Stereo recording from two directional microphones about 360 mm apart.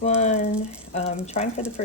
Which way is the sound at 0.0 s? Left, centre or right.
Centre.